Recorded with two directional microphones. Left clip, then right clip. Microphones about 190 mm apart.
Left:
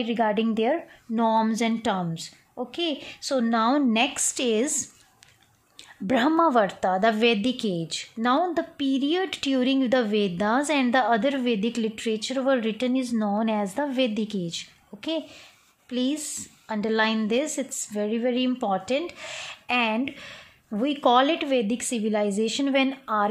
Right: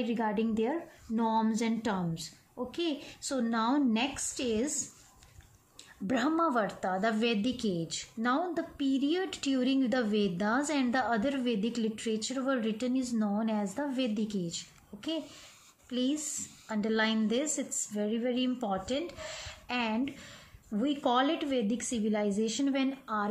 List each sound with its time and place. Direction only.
0.0 s a woman's voice: 45° left (ahead or behind)
6.0 s a woman's voice: 45° left (ahead or behind)